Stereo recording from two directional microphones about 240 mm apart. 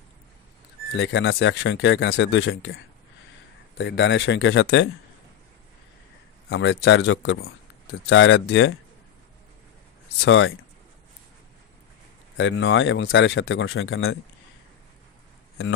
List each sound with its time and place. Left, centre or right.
0.9 s speech: left
6.5 s speech: left
10.2 s speech: left
12.4 s speech: left